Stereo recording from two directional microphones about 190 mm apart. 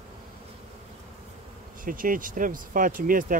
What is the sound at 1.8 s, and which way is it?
Speech, 45° right (ahead or behind).